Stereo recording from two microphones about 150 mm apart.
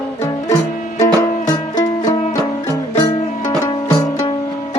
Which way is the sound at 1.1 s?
25° left (ahead or behind).